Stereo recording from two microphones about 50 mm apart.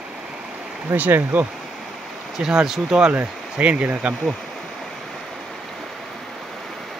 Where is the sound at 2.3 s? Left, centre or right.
Centre.